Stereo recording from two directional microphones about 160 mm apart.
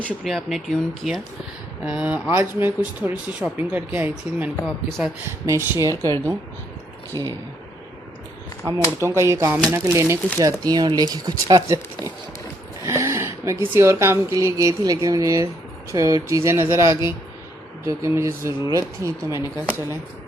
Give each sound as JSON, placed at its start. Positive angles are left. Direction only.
{"t": 0.0, "sound": "speech", "side_deg": 0}
{"t": 4.6, "sound": "speech", "side_deg": 0}
{"t": 5.5, "sound": "speech", "side_deg": -20}
{"t": 9.0, "sound": "speech", "side_deg": -20}